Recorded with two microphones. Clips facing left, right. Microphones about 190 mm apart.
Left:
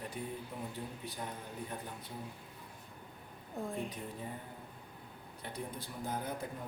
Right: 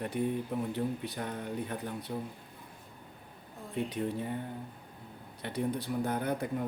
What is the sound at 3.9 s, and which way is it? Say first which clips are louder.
Speech: right 10 dB; 75° right (ahead or behind).